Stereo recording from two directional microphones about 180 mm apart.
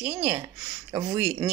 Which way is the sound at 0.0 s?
10° right (ahead or behind).